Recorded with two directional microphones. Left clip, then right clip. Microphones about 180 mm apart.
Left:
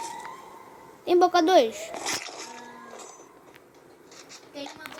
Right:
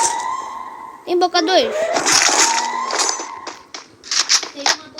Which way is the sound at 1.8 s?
45° right (ahead or behind).